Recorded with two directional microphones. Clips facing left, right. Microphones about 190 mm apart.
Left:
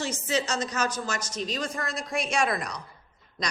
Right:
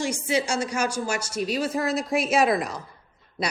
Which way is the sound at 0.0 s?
10° right (ahead or behind).